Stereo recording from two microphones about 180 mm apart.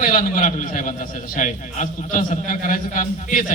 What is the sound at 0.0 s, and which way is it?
A man's voice, 45° left (ahead or behind).